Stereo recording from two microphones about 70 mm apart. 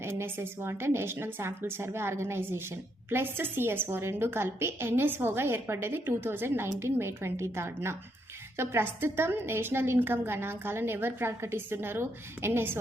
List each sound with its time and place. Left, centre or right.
0.0 s a woman's voice: right